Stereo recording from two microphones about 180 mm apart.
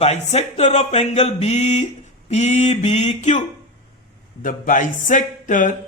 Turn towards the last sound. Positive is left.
turn(degrees=45)  # may be behind; listen again after turning